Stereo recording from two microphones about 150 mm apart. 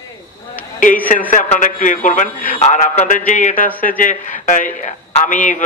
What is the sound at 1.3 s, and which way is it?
A man's voice, 60° left (ahead or behind).